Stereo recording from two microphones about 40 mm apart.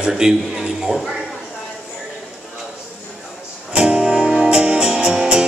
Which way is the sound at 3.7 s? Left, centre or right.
Right.